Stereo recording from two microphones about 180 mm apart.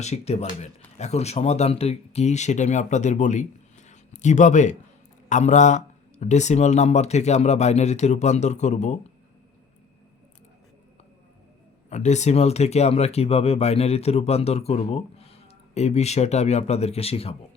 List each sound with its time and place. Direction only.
0.0 s speech: 35° left (ahead or behind)
11.9 s speech: 40° left (ahead or behind)